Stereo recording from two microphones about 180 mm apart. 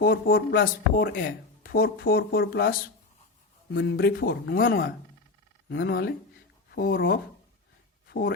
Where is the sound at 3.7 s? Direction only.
80° left; by 4.6 s 55° left (ahead or behind).